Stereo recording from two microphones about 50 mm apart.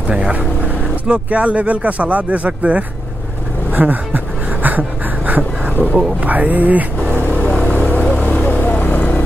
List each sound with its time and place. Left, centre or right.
1.0 s speech: right
4.6 s a sound: right
6.2 s speech: right
7.9 s vehicle: left
8.2 s vehicle: left